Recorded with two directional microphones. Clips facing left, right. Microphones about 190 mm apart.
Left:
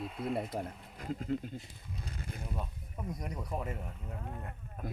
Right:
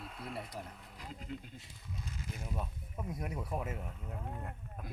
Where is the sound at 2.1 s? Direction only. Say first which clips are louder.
Left 1 dB; 55° left (ahead or behind).